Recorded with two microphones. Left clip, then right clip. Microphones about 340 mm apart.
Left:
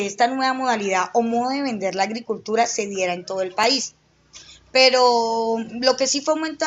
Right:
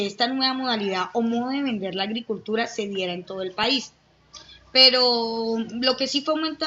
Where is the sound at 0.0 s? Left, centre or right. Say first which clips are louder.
Left 4 dB; centre.